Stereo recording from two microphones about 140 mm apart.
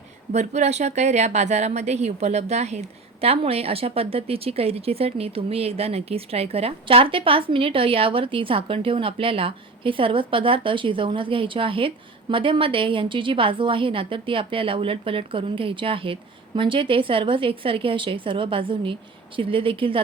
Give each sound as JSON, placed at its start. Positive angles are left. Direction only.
{"t": 0.3, "sound": "a woman's voice", "side_deg": -55}